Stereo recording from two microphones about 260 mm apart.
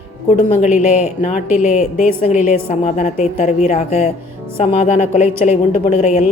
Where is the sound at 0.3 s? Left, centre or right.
Left.